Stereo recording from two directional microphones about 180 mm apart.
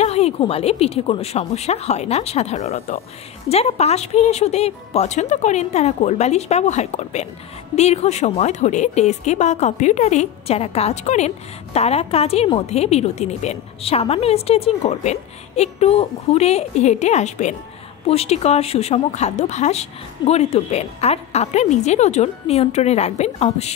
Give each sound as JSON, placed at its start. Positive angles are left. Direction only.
{"t": 0.0, "sound": "speech", "side_deg": 35}